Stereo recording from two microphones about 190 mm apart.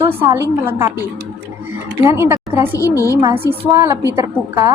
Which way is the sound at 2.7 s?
15° left (ahead or behind).